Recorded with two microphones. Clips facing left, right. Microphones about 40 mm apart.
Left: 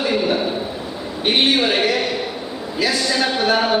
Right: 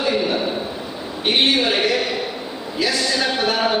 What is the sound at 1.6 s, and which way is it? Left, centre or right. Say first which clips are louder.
A man's voice: left 1 dB; centre.